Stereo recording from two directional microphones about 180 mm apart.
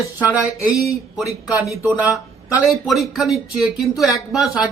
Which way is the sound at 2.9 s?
Centre (ahead or behind).